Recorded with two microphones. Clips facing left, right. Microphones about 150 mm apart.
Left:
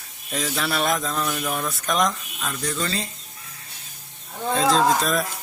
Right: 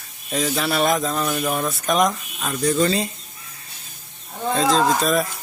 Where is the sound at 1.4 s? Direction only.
20° right (ahead or behind).